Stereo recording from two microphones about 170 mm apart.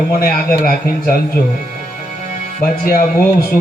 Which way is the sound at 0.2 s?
60° left (ahead or behind).